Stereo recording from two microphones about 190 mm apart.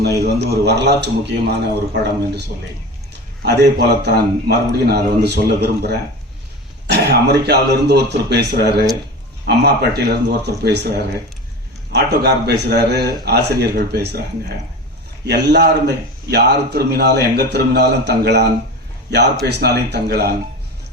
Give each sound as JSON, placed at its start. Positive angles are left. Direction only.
{"t": 0.2, "sound": "a man's voice", "side_deg": -55}
{"t": 3.4, "sound": "a man's voice", "side_deg": -60}
{"t": 15.3, "sound": "a man's voice", "side_deg": -60}
{"t": 19.5, "sound": "a man's voice", "side_deg": -60}